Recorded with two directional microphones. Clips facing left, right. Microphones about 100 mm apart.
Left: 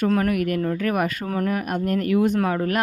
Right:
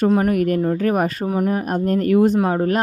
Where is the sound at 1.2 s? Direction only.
15° right (ahead or behind).